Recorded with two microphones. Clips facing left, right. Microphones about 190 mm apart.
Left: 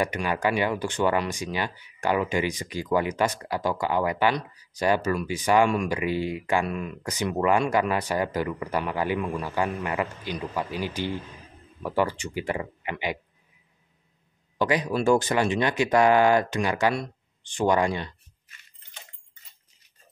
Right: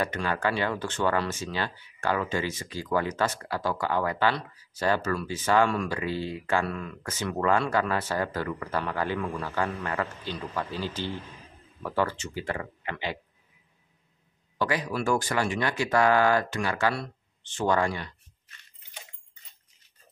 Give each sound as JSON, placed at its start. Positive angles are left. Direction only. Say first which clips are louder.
{"t": 0.0, "sound": "speech", "louder": "left 2 dB", "side_deg": 15}
{"t": 14.6, "sound": "speech", "louder": "left 4 dB", "side_deg": 20}